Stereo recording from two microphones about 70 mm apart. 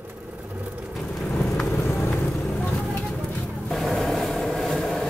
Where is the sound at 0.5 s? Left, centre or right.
Right.